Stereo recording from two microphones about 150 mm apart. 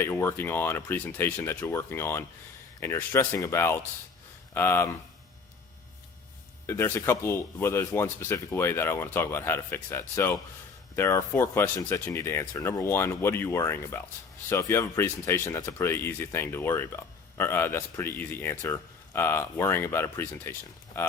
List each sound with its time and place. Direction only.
0.0 s speech: 15° left (ahead or behind)
6.7 s speech: 15° left (ahead or behind)